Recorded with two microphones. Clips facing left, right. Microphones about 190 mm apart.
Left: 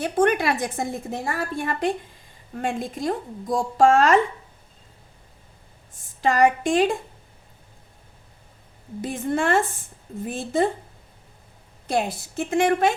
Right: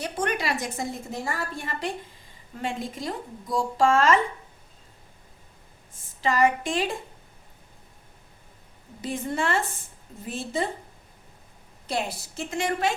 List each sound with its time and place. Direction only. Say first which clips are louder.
0.0 s a woman's voice: left 8 dB; 55° left (ahead or behind)
6.2 s a woman's voice: left 4 dB; 50° left (ahead or behind)
9.0 s a woman's voice: left 4 dB; 55° left (ahead or behind)
11.9 s a woman's voice: left 5 dB; 50° left (ahead or behind)